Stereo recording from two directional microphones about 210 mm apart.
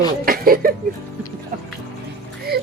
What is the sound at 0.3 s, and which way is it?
Speech, 45° right (ahead or behind).